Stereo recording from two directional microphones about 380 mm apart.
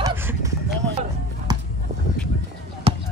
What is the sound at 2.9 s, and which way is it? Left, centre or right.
Basketball bounce, centre.